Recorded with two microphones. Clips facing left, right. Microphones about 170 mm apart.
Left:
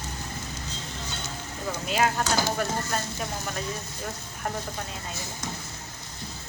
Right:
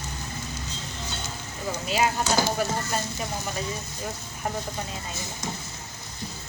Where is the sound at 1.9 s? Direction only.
5° right (ahead or behind).